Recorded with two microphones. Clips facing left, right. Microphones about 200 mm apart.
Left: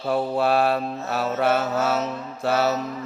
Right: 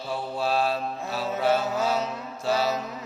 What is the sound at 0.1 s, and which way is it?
Mantra, 60° left (ahead or behind).